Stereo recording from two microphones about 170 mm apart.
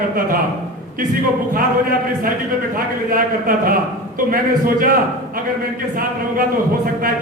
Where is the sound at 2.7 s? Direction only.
55° right (ahead or behind).